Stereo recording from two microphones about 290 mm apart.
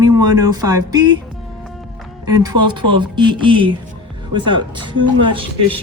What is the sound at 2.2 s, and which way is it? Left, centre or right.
Speech, centre.